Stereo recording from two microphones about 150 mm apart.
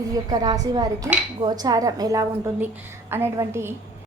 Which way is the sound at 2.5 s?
15° right (ahead or behind).